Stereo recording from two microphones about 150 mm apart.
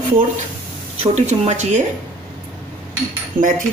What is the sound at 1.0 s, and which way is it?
Speech, 45° right (ahead or behind).